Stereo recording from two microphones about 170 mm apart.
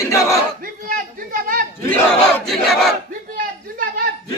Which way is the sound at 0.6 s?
55° right (ahead or behind).